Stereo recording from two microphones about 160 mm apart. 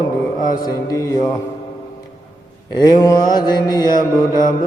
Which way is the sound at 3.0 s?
25° left (ahead or behind).